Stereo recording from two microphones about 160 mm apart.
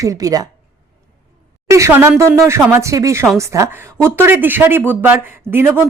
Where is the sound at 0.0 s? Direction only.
20° right (ahead or behind).